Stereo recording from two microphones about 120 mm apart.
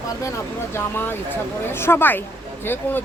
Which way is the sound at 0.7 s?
20° left (ahead or behind).